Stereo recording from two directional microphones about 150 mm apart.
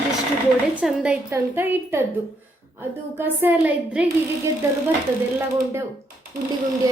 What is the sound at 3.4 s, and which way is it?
Speech, 10° right (ahead or behind).